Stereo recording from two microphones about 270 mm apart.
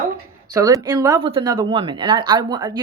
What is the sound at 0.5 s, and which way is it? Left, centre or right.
Speech, centre.